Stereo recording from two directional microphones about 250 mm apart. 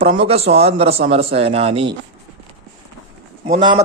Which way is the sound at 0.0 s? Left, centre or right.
Right.